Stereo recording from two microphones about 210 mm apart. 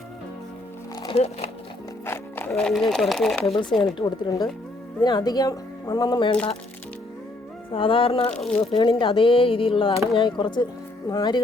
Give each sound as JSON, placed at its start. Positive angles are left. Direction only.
{"t": 1.0, "sound": "speech", "side_deg": 30}
{"t": 2.0, "sound": "speech", "side_deg": 10}
{"t": 3.4, "sound": "speech", "side_deg": 25}
{"t": 3.7, "sound": "speech", "side_deg": 0}
{"t": 3.9, "sound": "speech", "side_deg": 20}
{"t": 7.7, "sound": "speech", "side_deg": 25}
{"t": 8.3, "sound": "speech", "side_deg": 5}
{"t": 8.7, "sound": "speech", "side_deg": 25}